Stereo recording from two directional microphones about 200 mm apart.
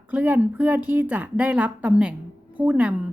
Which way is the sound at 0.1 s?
10° right (ahead or behind).